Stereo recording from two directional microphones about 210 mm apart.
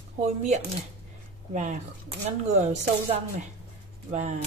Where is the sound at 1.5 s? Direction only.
35° right (ahead or behind).